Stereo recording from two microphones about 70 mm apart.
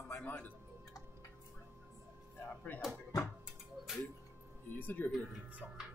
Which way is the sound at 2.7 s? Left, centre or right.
Left.